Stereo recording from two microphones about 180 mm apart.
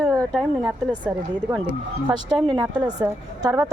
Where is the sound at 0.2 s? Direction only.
Centre (ahead or behind).